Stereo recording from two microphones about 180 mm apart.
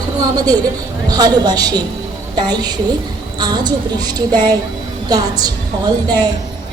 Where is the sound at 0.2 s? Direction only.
20° right (ahead or behind).